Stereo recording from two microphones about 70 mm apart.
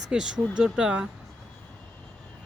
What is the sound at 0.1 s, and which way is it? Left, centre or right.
Speech, centre.